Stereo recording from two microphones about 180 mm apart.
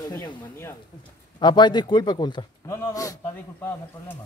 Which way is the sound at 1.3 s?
25° left (ahead or behind).